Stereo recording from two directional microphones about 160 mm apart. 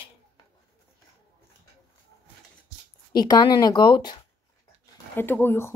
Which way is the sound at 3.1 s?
25° left (ahead or behind).